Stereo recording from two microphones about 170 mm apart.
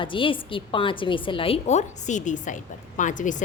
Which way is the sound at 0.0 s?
30° left (ahead or behind).